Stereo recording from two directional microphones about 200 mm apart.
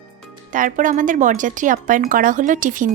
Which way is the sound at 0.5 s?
40° right (ahead or behind).